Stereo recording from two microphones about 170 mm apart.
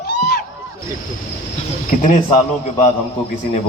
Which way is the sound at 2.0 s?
50° left (ahead or behind).